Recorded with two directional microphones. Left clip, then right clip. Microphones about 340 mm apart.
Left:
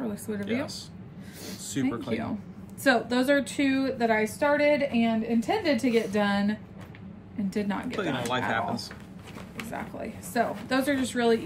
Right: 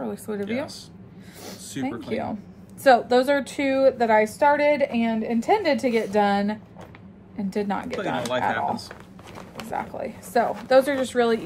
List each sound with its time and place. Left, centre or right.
0.0 s speech: centre
1.8 s speech: centre
2.8 s a woman's voice: centre
8.0 s speech: centre
9.7 s speech: centre